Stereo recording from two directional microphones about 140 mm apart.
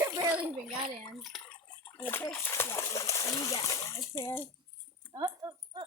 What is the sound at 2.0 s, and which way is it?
Speech, 15° left (ahead or behind).